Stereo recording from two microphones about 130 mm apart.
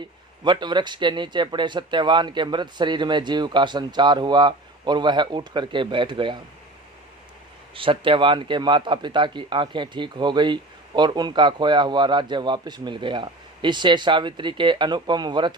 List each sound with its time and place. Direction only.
0.4 s a man's voice: 35° right (ahead or behind)
7.8 s a man's voice: 40° right (ahead or behind)